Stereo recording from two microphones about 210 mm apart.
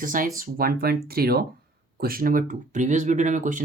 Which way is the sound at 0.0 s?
40° right (ahead or behind).